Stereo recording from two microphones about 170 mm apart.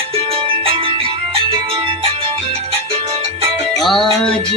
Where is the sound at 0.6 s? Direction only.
30° right (ahead or behind).